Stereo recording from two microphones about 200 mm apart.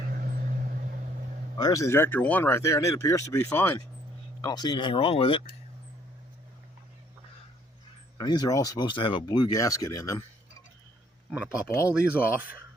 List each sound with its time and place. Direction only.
1.5 s speech: 20° left (ahead or behind)
8.2 s speech: 20° left (ahead or behind)
11.9 s speech: 5° right (ahead or behind)